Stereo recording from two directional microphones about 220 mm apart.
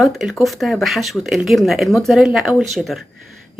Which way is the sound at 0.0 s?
Centre (ahead or behind).